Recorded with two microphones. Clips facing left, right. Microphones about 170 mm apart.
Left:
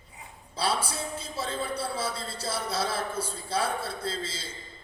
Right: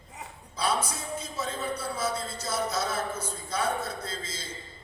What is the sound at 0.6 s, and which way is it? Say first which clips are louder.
A man's voice: even; 30° left (ahead or behind).